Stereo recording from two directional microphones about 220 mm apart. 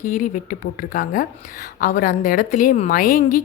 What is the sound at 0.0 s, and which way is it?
Speech, 35° left (ahead or behind).